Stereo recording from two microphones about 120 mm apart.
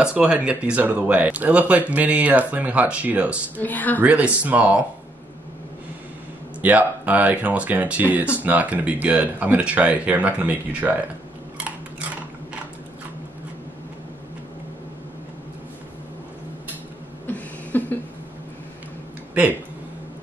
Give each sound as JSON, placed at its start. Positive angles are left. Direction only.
{"t": 0.0, "sound": "speech", "side_deg": -10}
{"t": 3.6, "sound": "a woman's voice", "side_deg": 15}
{"t": 4.0, "sound": "speech", "side_deg": -10}
{"t": 6.6, "sound": "speech", "side_deg": -15}
{"t": 11.5, "sound": "scissors", "side_deg": -10}
{"t": 17.3, "sound": "a sound", "side_deg": 15}